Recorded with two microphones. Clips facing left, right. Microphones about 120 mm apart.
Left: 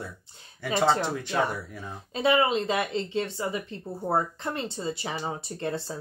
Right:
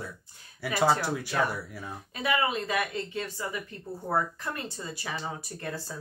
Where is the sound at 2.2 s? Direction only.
25° left (ahead or behind).